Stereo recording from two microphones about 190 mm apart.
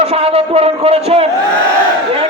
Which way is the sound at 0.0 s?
30° right (ahead or behind).